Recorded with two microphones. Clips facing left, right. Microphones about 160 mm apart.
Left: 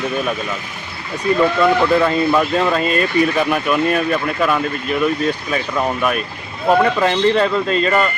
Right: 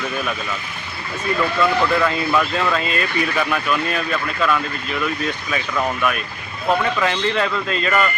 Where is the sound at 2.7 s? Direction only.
45° left (ahead or behind).